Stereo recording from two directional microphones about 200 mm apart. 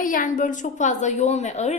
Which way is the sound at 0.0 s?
45° left (ahead or behind).